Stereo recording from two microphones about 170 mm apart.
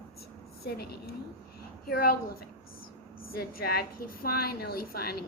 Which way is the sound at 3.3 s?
65° left (ahead or behind).